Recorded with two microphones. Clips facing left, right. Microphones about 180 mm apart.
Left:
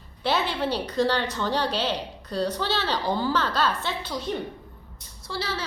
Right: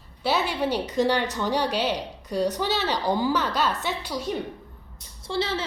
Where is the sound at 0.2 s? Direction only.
10° right (ahead or behind).